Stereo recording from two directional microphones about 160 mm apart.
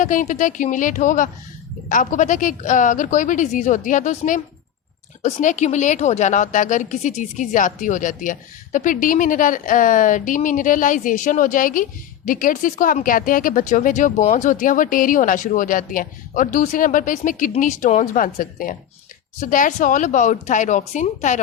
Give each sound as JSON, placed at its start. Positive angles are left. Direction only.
{"t": 0.0, "sound": "a woman's voice", "side_deg": 55}